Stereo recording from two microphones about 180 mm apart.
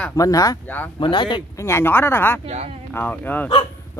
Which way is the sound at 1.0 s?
25° left (ahead or behind).